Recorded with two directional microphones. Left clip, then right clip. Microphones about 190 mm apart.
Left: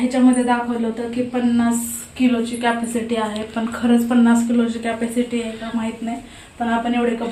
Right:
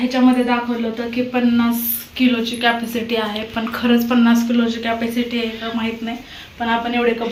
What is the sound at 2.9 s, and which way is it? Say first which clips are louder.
A man's voice: right 1 dB; 5° left (ahead or behind).